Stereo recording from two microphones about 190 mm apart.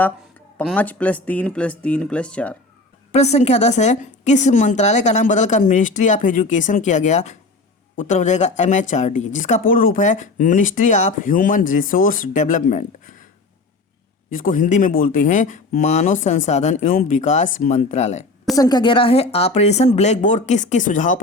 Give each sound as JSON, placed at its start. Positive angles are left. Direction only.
{"t": 0.8, "sound": "speech", "side_deg": 10}
{"t": 3.1, "sound": "a woman's voice", "side_deg": 35}
{"t": 14.3, "sound": "a woman's voice", "side_deg": 45}
{"t": 18.5, "sound": "a woman's voice", "side_deg": 20}